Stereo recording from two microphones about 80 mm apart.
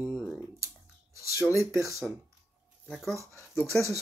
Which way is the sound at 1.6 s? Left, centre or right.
Right.